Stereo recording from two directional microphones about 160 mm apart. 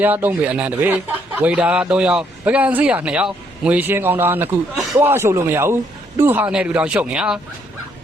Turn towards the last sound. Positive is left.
turn(degrees=-5)  # may be behind; listen again after turning